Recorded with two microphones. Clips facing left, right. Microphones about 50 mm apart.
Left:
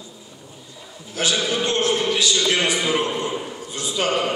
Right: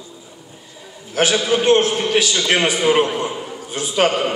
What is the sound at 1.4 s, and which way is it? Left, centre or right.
A man's voice, right.